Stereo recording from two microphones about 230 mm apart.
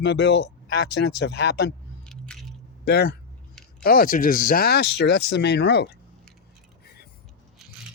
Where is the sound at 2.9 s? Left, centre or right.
Left.